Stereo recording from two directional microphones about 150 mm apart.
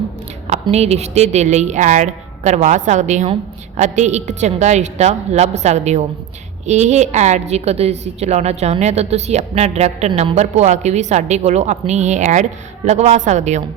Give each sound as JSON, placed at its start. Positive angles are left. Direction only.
{"t": 0.4, "sound": "a woman's voice", "side_deg": -45}